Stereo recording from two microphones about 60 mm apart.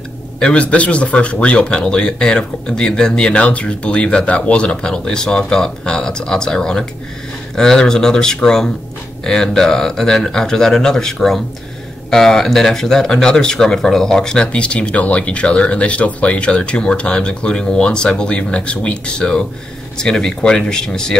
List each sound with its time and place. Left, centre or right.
0.4 s speech: centre